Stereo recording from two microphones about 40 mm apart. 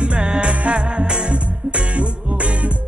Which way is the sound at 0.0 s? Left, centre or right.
Right.